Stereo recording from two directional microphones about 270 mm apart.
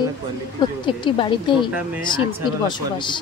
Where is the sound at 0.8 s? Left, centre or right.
Centre.